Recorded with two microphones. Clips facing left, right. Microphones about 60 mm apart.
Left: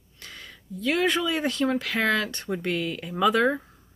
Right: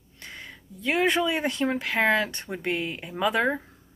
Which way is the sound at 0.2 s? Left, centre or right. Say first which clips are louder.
Right 2 dB; right.